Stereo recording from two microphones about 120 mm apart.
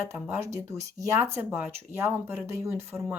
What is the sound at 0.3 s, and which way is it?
Speech, 25° right (ahead or behind).